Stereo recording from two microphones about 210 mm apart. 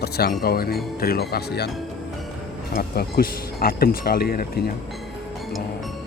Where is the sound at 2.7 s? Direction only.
45° left (ahead or behind).